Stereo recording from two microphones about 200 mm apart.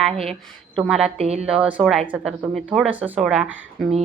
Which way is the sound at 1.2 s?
30° right (ahead or behind).